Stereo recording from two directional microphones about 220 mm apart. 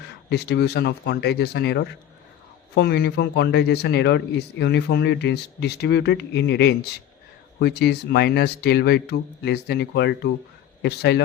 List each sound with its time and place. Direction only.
0.3 s a man's voice: 50° left (ahead or behind)